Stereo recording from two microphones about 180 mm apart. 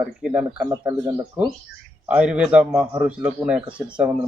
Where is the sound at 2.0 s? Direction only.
5° right (ahead or behind).